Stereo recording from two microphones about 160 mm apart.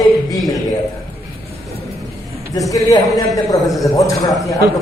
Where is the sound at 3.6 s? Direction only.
Centre (ahead or behind).